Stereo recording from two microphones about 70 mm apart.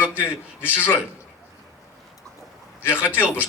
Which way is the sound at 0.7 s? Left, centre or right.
Left.